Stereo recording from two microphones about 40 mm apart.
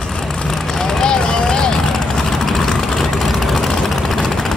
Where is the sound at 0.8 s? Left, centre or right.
Centre.